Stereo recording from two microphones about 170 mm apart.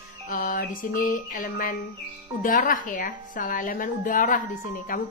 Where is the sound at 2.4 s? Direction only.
55° left (ahead or behind).